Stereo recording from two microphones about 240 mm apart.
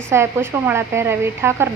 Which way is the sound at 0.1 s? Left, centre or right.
Centre.